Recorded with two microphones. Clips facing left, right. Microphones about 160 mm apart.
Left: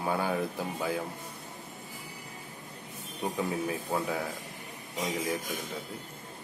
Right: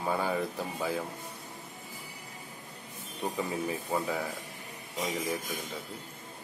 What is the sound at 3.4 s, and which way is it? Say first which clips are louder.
Speech: left 2 dB; centre (ahead or behind).